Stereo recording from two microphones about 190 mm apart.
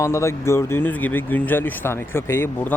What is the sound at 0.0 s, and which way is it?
Speech, 15° left (ahead or behind).